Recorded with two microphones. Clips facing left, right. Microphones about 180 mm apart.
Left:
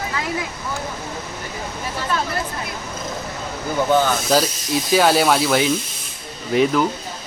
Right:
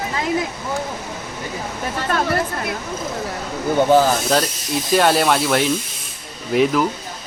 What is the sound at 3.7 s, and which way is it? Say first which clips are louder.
Speech: right 3 dB; 30° right (ahead or behind).